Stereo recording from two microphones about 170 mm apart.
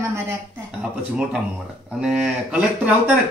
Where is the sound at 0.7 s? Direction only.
5° right (ahead or behind).